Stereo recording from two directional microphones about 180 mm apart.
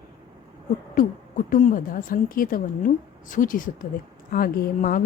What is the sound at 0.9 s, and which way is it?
A woman's voice, 45° left (ahead or behind).